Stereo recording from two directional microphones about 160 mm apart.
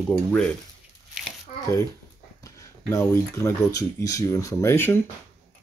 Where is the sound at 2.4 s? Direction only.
20° left (ahead or behind).